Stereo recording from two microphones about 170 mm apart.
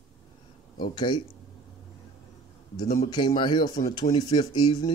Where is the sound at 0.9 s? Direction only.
25° left (ahead or behind).